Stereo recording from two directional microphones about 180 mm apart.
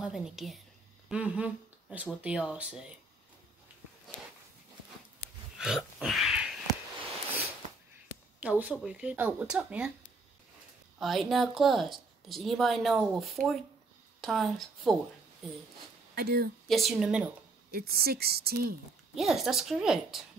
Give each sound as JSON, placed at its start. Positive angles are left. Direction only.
{"t": 0.0, "sound": "speech", "side_deg": -5}
{"t": 5.6, "sound": "a sound", "side_deg": 0}
{"t": 8.4, "sound": "speech", "side_deg": -10}
{"t": 11.0, "sound": "speech", "side_deg": 0}
{"t": 16.2, "sound": "a woman's voice", "side_deg": -60}
{"t": 16.6, "sound": "speech", "side_deg": 0}
{"t": 17.6, "sound": "a woman's voice", "side_deg": -60}
{"t": 19.1, "sound": "speech", "side_deg": 0}